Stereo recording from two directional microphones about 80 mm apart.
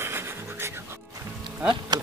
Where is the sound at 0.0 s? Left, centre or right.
Right.